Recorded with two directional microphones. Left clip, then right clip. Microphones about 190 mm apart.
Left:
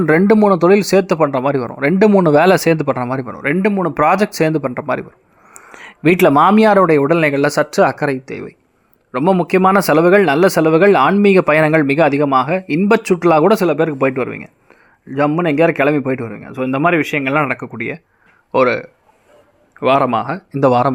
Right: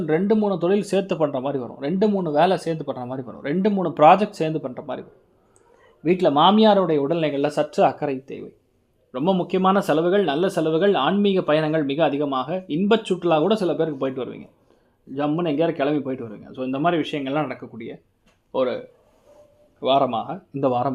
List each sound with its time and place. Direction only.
0.0 s speech: 45° left (ahead or behind)
2.1 s speech: 45° left (ahead or behind)
5.5 s a sound: 55° left (ahead or behind)
6.2 s speech: 30° left (ahead or behind)
15.3 s speech: 15° left (ahead or behind)
15.8 s speech: 30° left (ahead or behind)